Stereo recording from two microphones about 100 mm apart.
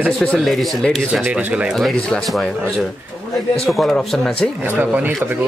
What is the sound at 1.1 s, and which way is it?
Speech, 15° right (ahead or behind).